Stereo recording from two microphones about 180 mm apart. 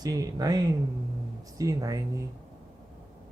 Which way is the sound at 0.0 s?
20° right (ahead or behind).